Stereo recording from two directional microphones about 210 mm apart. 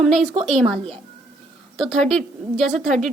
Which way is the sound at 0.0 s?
Centre (ahead or behind).